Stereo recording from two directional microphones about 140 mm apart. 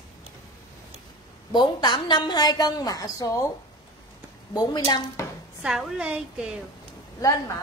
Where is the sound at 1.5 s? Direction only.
30° left (ahead or behind).